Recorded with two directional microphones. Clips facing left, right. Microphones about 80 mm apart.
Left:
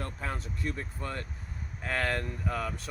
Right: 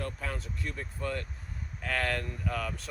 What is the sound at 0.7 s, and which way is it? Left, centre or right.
Speech, left.